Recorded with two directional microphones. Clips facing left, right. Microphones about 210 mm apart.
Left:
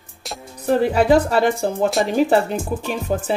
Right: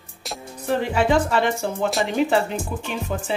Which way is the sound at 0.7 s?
40° left (ahead or behind).